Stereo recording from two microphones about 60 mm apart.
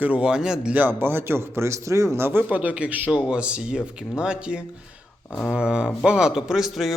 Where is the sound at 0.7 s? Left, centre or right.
Right.